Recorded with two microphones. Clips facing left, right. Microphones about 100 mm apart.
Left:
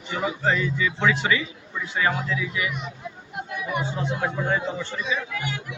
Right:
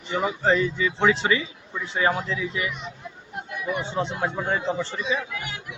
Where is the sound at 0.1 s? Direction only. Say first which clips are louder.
Right 2 dB; 30° right (ahead or behind).